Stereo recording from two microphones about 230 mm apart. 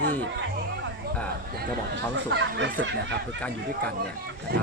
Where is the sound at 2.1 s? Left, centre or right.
Right.